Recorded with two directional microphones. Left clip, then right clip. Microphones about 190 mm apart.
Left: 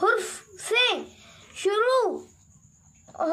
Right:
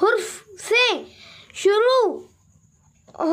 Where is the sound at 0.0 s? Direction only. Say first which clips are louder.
Right 4 dB; 40° right (ahead or behind).